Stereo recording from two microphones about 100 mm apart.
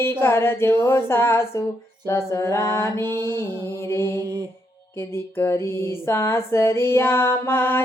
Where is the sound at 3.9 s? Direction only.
25° left (ahead or behind).